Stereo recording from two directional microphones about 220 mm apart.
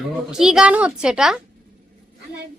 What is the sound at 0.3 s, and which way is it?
A woman's voice, 5° right (ahead or behind).